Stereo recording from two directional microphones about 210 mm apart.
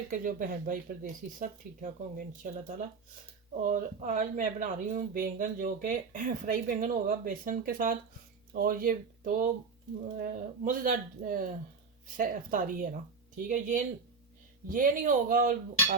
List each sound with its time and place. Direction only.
0.1 s speech: 40° right (ahead or behind)